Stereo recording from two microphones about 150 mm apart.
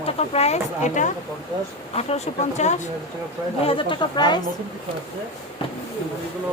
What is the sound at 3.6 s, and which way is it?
Speech, 35° left (ahead or behind).